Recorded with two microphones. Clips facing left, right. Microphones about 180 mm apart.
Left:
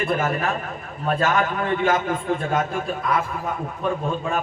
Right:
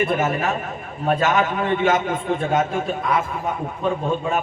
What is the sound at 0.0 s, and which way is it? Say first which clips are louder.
A man's voice: right 2 dB; 20° right (ahead or behind).